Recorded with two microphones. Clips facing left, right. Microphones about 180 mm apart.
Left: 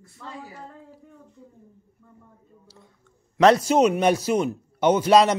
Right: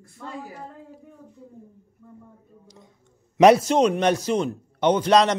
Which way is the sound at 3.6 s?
5° left (ahead or behind).